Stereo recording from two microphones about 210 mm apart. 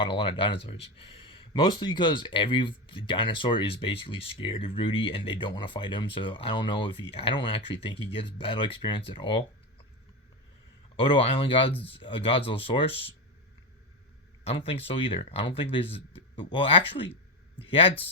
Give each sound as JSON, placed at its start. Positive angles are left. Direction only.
{"t": 0.0, "sound": "speech", "side_deg": 25}
{"t": 10.9, "sound": "speech", "side_deg": 25}
{"t": 14.4, "sound": "speech", "side_deg": 25}